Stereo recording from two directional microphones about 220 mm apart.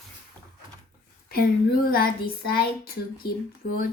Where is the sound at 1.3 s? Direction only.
40° left (ahead or behind).